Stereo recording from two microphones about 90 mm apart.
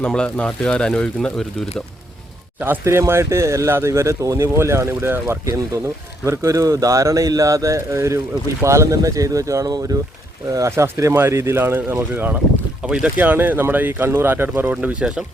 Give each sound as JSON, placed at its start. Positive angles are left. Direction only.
{"t": 0.0, "sound": "speech", "side_deg": 10}
{"t": 2.6, "sound": "speech", "side_deg": -25}
{"t": 12.8, "sound": "speech", "side_deg": -10}